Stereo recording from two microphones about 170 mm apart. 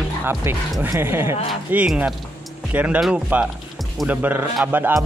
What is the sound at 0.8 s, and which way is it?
Speech, 15° right (ahead or behind).